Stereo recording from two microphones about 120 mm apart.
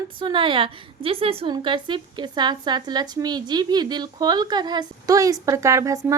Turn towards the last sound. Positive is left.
turn(degrees=-25)  # may be behind; listen again after turning